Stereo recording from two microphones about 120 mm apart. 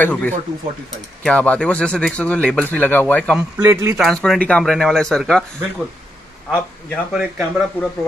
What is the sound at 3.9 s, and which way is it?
Speech, centre (ahead or behind).